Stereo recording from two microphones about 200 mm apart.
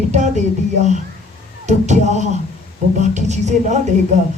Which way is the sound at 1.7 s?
35° right (ahead or behind).